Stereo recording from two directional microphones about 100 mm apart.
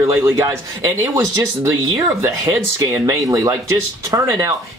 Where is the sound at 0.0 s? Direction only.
30° right (ahead or behind).